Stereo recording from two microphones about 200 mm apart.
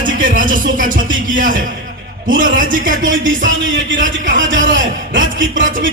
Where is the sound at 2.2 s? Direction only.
45° right (ahead or behind).